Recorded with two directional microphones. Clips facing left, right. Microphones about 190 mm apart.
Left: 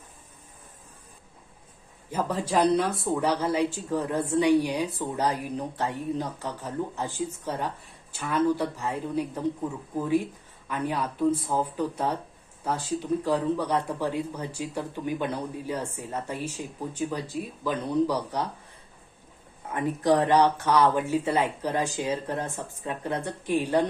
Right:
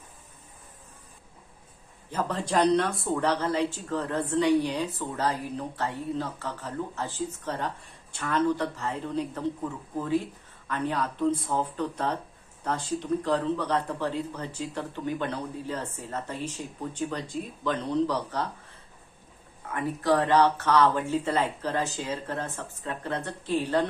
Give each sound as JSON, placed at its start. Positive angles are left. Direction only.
{"t": 2.0, "sound": "speech", "side_deg": 10}
{"t": 19.7, "sound": "speech", "side_deg": 20}